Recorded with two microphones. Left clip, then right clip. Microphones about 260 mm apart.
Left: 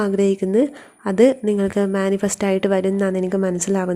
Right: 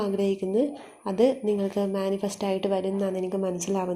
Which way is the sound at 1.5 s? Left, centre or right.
Left.